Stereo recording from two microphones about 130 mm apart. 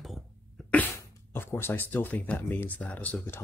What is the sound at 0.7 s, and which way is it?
Speech, 15° left (ahead or behind).